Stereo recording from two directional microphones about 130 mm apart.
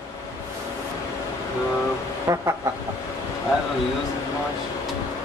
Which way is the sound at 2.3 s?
25° right (ahead or behind).